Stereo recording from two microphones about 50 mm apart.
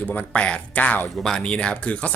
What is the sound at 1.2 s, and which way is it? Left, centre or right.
Speech, centre.